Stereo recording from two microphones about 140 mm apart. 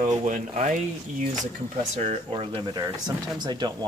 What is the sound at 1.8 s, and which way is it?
Speech, 55° right (ahead or behind).